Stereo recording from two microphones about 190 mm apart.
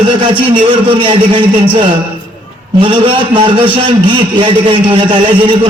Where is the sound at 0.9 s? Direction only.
25° right (ahead or behind).